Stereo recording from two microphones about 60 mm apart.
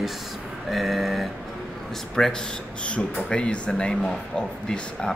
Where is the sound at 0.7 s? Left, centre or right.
Centre.